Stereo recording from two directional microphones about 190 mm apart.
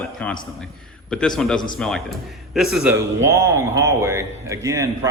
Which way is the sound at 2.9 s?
15° right (ahead or behind).